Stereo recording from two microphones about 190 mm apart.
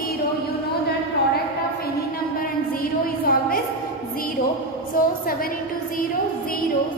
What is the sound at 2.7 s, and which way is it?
Child singing, 50° left (ahead or behind).